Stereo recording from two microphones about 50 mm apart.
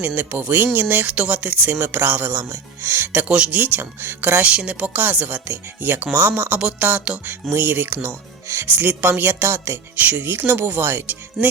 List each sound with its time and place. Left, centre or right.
0.0 s speech: right
3.2 s speech: right
3.6 s speech: right
4.4 s speech: right
7.5 s speech: right
10.0 s speech: right
10.2 s speech: right